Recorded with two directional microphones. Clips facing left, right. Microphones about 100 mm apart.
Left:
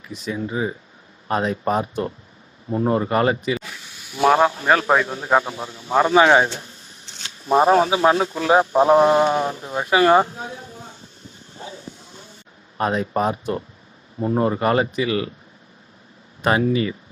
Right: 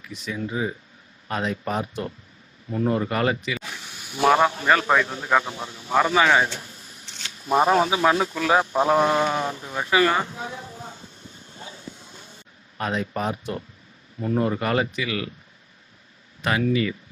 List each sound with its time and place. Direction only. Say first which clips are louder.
0.0 s speech: left 3 dB; 35° left (ahead or behind)
4.2 s a man's voice: left 2 dB; 15° left (ahead or behind); by 10.7 s 35° left (ahead or behind)
11.5 s a sound: left 5 dB; 30° left (ahead or behind)
14.2 s speech: left 4 dB; 30° left (ahead or behind)
16.4 s speech: left 4 dB; 35° left (ahead or behind)